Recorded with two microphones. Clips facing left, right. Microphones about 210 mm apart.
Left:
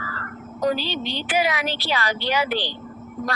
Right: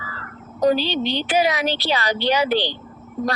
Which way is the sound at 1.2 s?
20° right (ahead or behind).